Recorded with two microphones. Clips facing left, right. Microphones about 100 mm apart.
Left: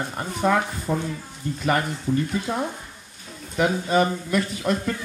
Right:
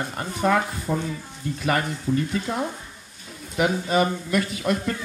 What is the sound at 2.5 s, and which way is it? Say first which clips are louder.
Speech: left 1 dB; 20° left (ahead or behind).